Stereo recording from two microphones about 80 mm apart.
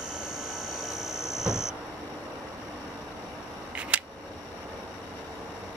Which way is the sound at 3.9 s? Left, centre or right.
Centre.